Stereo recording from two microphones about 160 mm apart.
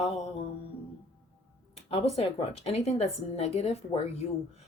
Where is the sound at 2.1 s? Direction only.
40° left (ahead or behind).